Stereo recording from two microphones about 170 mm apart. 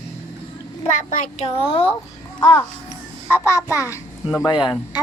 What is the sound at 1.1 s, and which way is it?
Speech, 50° left (ahead or behind).